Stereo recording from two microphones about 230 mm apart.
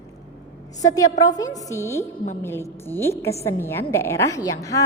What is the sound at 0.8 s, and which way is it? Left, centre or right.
A woman's voice, centre.